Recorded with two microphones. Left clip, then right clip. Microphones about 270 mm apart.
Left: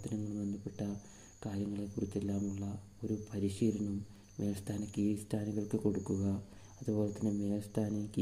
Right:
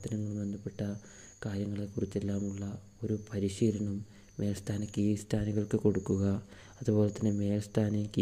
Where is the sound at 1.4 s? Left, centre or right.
Right.